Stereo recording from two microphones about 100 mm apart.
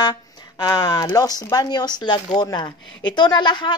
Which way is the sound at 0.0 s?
40° left (ahead or behind).